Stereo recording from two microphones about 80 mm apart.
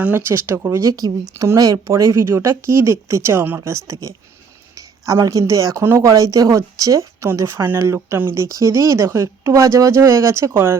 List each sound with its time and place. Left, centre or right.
0.1 s speech: right